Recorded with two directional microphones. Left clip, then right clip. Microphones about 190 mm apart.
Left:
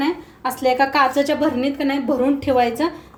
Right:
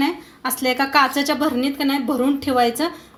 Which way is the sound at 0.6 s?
20° right (ahead or behind).